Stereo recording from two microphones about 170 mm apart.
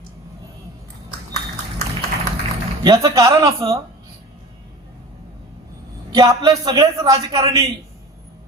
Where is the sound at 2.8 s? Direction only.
20° right (ahead or behind).